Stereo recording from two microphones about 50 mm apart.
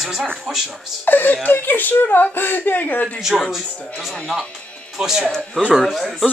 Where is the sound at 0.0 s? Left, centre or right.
Centre.